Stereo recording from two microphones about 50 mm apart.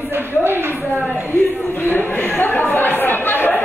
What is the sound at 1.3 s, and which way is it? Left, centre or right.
Speech, left.